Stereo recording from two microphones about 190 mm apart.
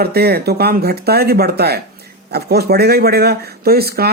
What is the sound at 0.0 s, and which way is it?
Speech, 55° right (ahead or behind).